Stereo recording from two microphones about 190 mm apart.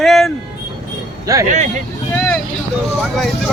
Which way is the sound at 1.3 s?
15° right (ahead or behind).